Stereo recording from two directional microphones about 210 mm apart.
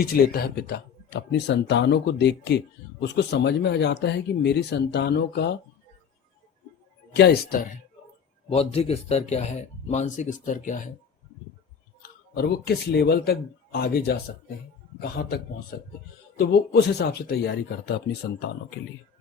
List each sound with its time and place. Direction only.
0.0 s speech: 50° left (ahead or behind)
7.1 s speech: 50° left (ahead or behind)
8.4 s speech: 30° left (ahead or behind)
12.3 s speech: 50° left (ahead or behind)
15.2 s speech: 45° left (ahead or behind)
16.4 s speech: 55° left (ahead or behind)